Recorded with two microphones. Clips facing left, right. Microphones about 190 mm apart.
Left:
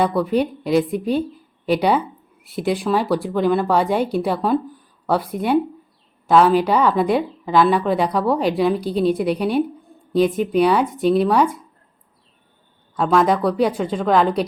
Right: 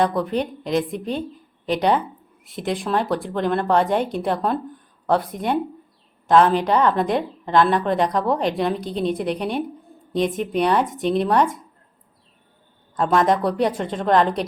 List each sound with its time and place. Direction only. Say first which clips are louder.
0.0 s a woman's voice: left 3 dB; 5° left (ahead or behind)
13.0 s a woman's voice: left 2 dB; centre (ahead or behind)